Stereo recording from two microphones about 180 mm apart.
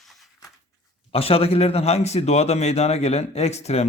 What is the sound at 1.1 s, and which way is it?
A man's voice, 35° left (ahead or behind).